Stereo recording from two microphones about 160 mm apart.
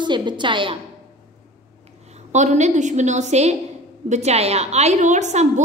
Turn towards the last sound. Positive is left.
turn(degrees=-50)  # may be behind; listen again after turning